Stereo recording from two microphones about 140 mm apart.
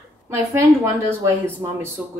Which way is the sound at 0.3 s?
20° right (ahead or behind).